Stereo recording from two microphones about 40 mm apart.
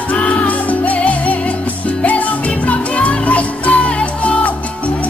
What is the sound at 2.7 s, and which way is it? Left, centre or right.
Music, left.